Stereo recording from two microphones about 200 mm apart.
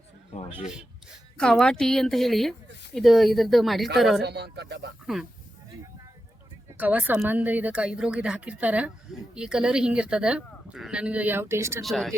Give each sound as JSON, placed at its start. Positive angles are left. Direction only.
{"t": 0.3, "sound": "a man's voice", "side_deg": 30}
{"t": 1.4, "sound": "a woman's voice", "side_deg": 5}
{"t": 4.2, "sound": "speech", "side_deg": -55}
{"t": 5.1, "sound": "a woman's voice", "side_deg": 0}
{"t": 6.7, "sound": "a woman's voice", "side_deg": -10}
{"t": 11.8, "sound": "a woman's voice", "side_deg": 0}